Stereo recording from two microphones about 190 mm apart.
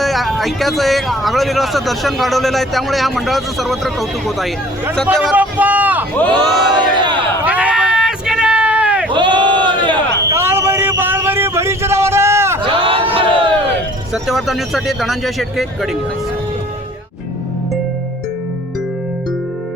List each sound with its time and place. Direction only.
0.0 s speech: centre (ahead or behind)
6.7 s crowd: 25° right (ahead or behind)
7.4 s a sound: 5° right (ahead or behind)
9.1 s crowd: 25° right (ahead or behind)
10.2 s vehicle: 10° right (ahead or behind)
12.6 s a sound: 30° right (ahead or behind)
14.1 s speech: centre (ahead or behind)